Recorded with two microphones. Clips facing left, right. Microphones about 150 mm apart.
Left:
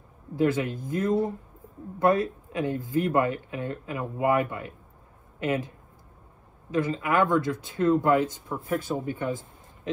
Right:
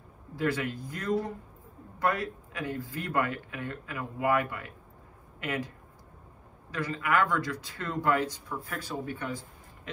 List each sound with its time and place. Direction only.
0.4 s speech: 20° left (ahead or behind)
6.7 s speech: 20° left (ahead or behind)